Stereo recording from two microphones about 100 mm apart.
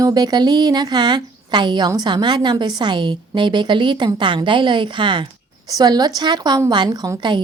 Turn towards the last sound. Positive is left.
turn(degrees=-35)  # may be behind; listen again after turning